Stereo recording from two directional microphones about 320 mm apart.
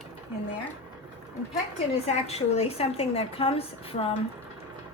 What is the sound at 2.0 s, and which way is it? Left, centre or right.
A woman's voice, centre.